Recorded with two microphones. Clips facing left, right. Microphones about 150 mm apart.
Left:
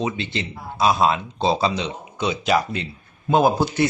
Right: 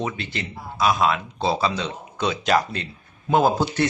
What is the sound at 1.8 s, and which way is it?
Speech, 10° left (ahead or behind).